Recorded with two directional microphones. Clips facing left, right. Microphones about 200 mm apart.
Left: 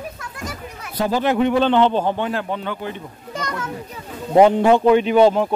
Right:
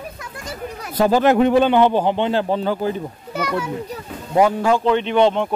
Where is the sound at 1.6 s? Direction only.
10° right (ahead or behind); by 3.0 s 35° right (ahead or behind).